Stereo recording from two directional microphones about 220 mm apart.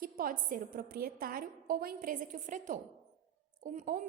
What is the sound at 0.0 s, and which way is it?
A woman's voice, 40° right (ahead or behind).